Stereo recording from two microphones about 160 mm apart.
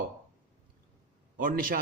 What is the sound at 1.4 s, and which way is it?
Speech, 60° right (ahead or behind).